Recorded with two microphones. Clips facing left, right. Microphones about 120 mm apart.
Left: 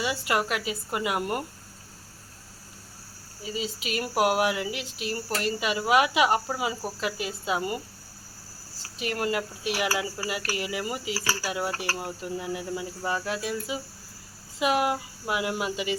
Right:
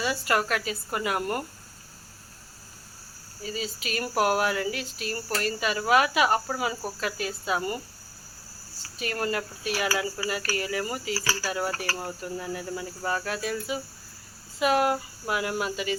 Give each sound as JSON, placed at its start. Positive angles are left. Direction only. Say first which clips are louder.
{"t": 0.0, "sound": "speech", "louder": "right 1 dB", "side_deg": 15}
{"t": 3.4, "sound": "speech", "louder": "left 1 dB", "side_deg": 20}
{"t": 9.0, "sound": "speech", "louder": "left 1 dB", "side_deg": 20}
{"t": 11.9, "sound": "speech", "louder": "left 1 dB", "side_deg": 10}